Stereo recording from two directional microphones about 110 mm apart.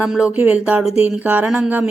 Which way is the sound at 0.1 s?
10° right (ahead or behind).